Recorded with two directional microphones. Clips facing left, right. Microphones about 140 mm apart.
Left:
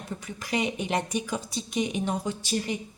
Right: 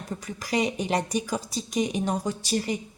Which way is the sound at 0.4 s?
40° right (ahead or behind).